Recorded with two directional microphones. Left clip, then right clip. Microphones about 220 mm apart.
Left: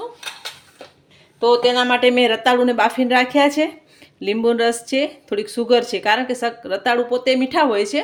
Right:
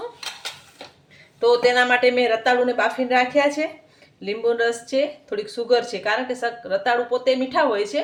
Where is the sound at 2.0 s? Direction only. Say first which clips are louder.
Left 3 dB; 35° left (ahead or behind).